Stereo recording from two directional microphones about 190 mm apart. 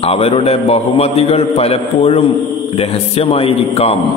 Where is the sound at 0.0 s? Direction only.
30° left (ahead or behind).